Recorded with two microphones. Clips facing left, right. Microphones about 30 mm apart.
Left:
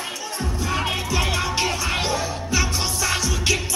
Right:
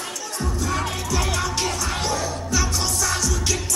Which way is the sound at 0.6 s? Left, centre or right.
Left.